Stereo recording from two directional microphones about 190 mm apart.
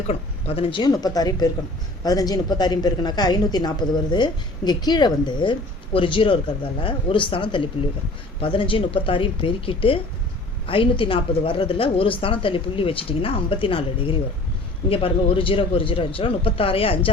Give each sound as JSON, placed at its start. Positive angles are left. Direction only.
{"t": 0.1, "sound": "a woman's voice", "side_deg": 30}